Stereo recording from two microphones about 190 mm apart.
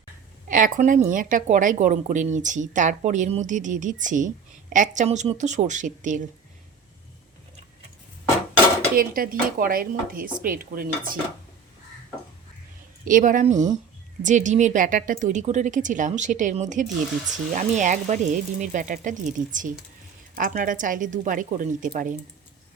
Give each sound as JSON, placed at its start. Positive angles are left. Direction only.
{"t": 0.4, "sound": "a woman's voice", "side_deg": -45}
{"t": 9.0, "sound": "a woman's voice", "side_deg": -50}
{"t": 13.1, "sound": "a woman's voice", "side_deg": -45}